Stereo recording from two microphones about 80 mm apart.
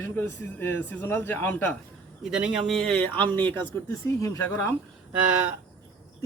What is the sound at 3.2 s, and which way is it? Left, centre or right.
Speech, right.